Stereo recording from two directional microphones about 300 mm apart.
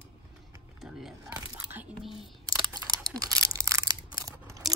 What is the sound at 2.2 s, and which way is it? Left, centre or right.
Camera, centre.